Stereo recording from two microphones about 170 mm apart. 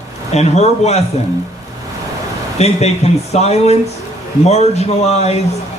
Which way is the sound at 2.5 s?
40° left (ahead or behind).